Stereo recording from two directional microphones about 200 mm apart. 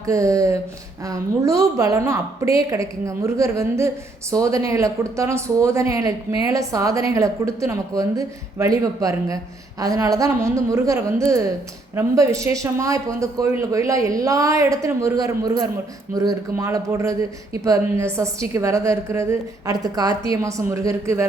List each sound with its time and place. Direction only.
0.0 s speech: 15° right (ahead or behind)